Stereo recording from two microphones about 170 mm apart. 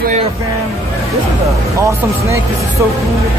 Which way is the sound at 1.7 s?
15° right (ahead or behind).